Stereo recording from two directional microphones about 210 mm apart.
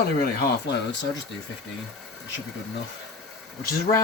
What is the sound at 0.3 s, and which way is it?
Speech, 50° left (ahead or behind).